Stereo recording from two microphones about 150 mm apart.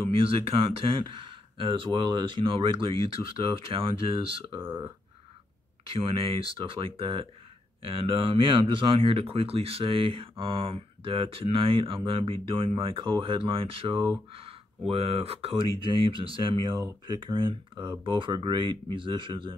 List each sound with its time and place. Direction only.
0.0 s speech: 40° right (ahead or behind)
4.6 s speech: 15° right (ahead or behind)
5.9 s speech: 35° right (ahead or behind)